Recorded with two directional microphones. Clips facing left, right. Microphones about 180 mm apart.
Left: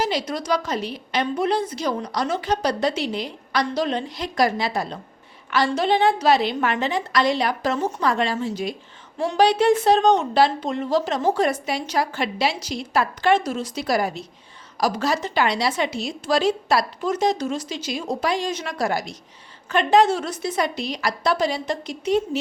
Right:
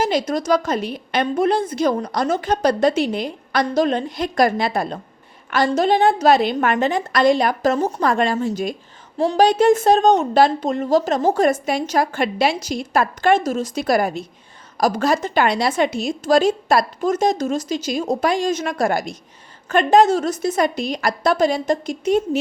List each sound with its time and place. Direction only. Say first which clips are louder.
0.0 s a woman's voice: right 5 dB; 50° right (ahead or behind)
9.1 s a woman's voice: right 3 dB; 35° right (ahead or behind)